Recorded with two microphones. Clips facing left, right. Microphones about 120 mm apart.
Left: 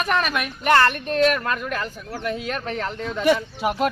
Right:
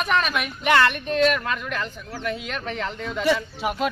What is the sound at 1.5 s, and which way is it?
Speech, 45° left (ahead or behind).